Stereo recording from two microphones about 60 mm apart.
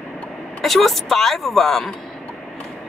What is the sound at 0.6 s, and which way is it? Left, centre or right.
Speech, centre.